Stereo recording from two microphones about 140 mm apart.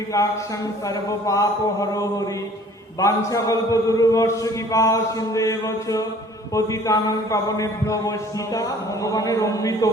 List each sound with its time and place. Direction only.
0.1 s a man's voice: 25° left (ahead or behind)
9.1 s a man's voice: 25° left (ahead or behind)